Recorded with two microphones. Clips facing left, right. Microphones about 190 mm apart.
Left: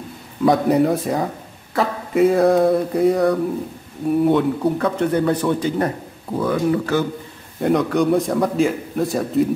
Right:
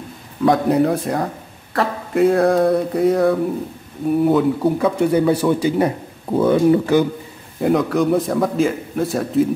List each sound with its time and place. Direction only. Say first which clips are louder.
0.4 s speech: even; centre (ahead or behind)
6.3 s speech: right 5 dB; 25° right (ahead or behind)
7.6 s speech: right 1 dB; centre (ahead or behind)